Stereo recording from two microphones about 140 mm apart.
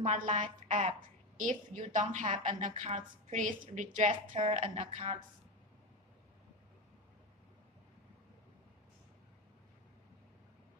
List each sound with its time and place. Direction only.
0.0 s a woman's voice: 60° right (ahead or behind)
4.1 s speech: 40° right (ahead or behind)